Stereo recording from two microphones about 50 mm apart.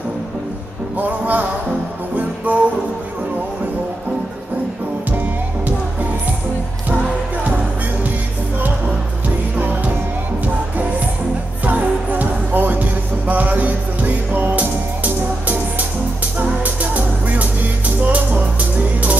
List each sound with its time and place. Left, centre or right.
0.9 s music: right
11.6 s music: right
16.3 s music: right